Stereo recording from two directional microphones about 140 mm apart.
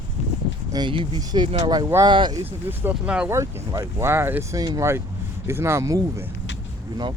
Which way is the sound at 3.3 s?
20° right (ahead or behind).